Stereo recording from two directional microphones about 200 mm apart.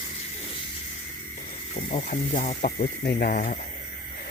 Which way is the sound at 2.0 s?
40° left (ahead or behind).